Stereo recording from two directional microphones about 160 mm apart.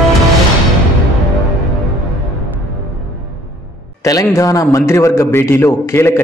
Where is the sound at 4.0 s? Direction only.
20° left (ahead or behind).